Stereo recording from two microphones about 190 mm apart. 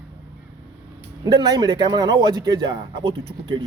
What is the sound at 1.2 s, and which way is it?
Speech, 20° right (ahead or behind).